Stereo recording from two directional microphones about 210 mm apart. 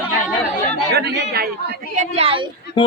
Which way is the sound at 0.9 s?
55° right (ahead or behind).